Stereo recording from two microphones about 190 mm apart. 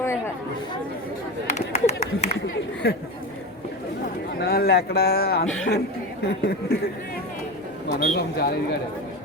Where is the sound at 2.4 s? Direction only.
65° left (ahead or behind).